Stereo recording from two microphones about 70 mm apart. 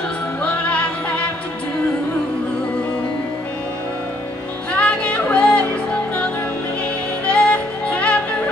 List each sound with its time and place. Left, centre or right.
0.4 s music: centre
4.7 s music: centre
7.2 s music: centre